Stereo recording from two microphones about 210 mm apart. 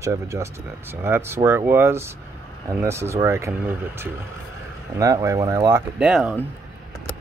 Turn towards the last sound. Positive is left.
turn(degrees=-5)  # may be behind; listen again after turning